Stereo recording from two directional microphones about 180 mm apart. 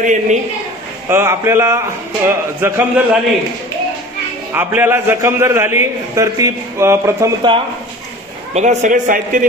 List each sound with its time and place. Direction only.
0.0 s speech: 45° right (ahead or behind)
1.0 s a man's voice: 15° right (ahead or behind)
4.6 s a man's voice: 10° right (ahead or behind)
8.5 s speech: 40° right (ahead or behind)